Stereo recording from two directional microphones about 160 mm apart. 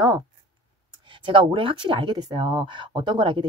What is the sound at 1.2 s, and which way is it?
Speech, 30° right (ahead or behind).